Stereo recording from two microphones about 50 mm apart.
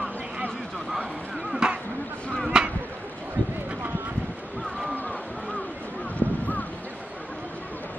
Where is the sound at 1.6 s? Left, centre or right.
Centre.